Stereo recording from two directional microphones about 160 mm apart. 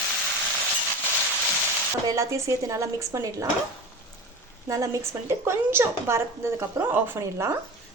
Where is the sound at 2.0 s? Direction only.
20° right (ahead or behind).